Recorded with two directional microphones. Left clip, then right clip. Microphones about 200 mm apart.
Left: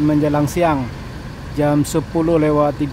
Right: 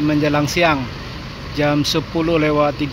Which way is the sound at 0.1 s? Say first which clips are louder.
Even; 10° left (ahead or behind).